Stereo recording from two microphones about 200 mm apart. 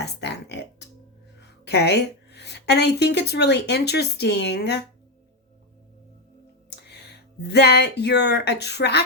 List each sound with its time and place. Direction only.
0.0 s music: 55° left (ahead or behind)
1.4 s a woman's voice: 55° left (ahead or behind)
6.7 s speech: 55° left (ahead or behind)